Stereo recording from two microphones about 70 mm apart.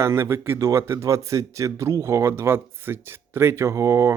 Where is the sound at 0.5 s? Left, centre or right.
Right.